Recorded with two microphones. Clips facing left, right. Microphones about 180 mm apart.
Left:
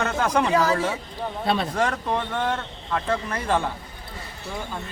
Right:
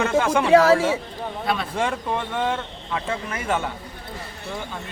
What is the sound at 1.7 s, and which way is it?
Speech, 10° right (ahead or behind).